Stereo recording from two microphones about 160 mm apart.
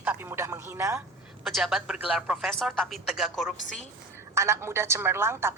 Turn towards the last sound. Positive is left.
turn(degrees=-15)  # may be behind; listen again after turning